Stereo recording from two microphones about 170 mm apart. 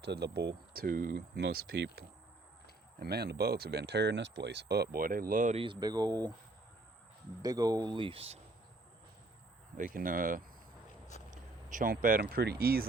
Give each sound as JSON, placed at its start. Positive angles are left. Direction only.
{"t": 0.0, "sound": "speech", "side_deg": -80}
{"t": 5.5, "sound": "speech", "side_deg": -30}
{"t": 7.4, "sound": "speech", "side_deg": -20}
{"t": 9.7, "sound": "speech", "side_deg": -55}